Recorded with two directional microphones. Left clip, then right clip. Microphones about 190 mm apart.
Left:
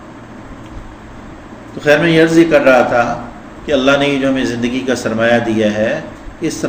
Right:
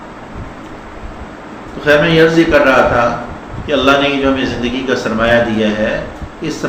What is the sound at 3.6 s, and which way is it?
A man's voice, 45° left (ahead or behind).